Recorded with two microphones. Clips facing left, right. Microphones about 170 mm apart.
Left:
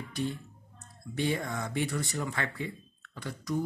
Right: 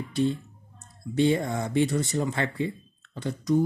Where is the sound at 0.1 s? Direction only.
25° right (ahead or behind).